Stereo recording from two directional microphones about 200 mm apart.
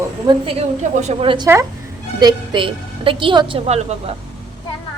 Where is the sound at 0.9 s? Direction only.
35° right (ahead or behind).